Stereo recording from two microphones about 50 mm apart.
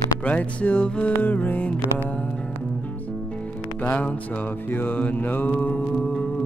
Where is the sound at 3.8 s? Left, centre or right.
Left.